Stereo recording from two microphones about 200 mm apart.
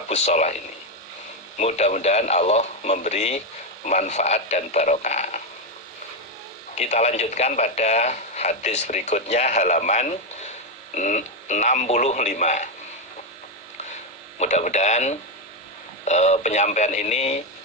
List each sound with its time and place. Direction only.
0.1 s speech: 35° left (ahead or behind)
1.5 s speech: 35° left (ahead or behind)
6.7 s speech: 35° left (ahead or behind)
14.3 s speech: 35° left (ahead or behind)